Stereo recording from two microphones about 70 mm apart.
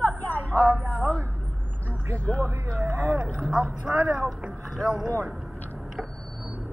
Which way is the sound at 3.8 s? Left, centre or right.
Right.